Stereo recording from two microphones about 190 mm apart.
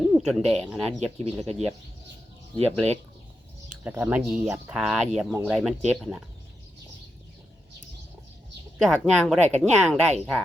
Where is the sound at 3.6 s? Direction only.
10° right (ahead or behind).